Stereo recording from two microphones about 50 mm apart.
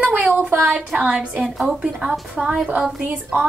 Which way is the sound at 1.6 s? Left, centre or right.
Centre.